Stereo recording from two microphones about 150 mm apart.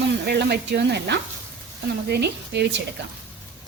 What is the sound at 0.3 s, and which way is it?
Speech, 90° right.